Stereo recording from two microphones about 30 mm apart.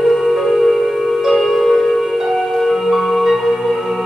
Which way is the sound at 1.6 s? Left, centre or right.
Centre.